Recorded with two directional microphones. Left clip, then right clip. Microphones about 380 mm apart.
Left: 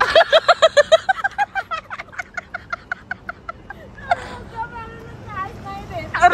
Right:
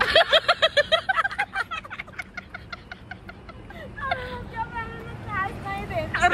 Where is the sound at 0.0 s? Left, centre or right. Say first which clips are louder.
Left 5 dB; centre.